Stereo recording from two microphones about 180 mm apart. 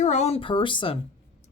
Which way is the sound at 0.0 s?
40° left (ahead or behind).